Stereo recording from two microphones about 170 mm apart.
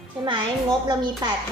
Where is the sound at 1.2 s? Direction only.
25° right (ahead or behind).